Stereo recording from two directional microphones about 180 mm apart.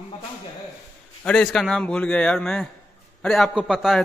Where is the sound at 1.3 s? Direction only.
5° left (ahead or behind).